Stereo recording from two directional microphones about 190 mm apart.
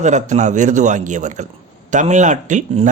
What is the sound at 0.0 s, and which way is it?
Speech, 40° right (ahead or behind).